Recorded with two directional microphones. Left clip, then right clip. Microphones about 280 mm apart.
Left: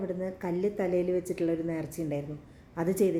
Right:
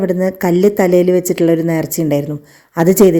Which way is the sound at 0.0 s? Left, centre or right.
Right.